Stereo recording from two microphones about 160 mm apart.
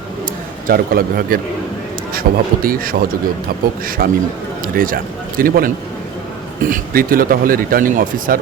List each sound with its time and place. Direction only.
0.7 s speech: 65° right (ahead or behind)